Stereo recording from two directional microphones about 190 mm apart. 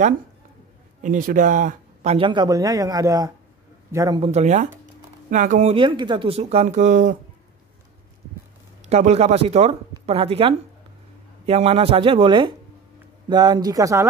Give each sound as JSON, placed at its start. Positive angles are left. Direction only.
{"t": 1.0, "sound": "speech", "side_deg": -45}
{"t": 2.1, "sound": "a man's voice", "side_deg": -25}
{"t": 4.2, "sound": "speech", "side_deg": -35}
{"t": 8.8, "sound": "speech", "side_deg": -35}